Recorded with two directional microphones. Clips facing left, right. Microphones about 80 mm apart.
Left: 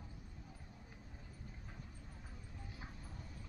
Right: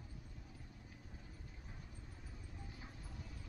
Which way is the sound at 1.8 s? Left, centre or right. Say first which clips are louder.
Left 1 dB; centre.